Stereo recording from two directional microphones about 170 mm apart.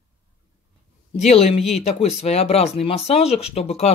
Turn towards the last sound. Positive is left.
turn(degrees=40)  # may be behind; listen again after turning